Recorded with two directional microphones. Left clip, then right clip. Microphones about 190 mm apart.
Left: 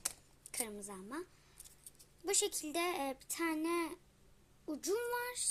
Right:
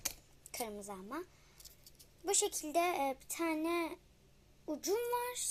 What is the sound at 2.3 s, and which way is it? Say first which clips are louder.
A child's voice: right 1 dB; 40° left (ahead or behind).